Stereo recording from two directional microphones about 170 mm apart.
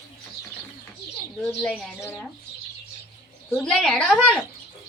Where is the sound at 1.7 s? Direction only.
5° right (ahead or behind).